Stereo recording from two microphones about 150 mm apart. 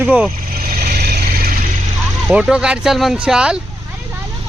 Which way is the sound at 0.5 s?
80° right.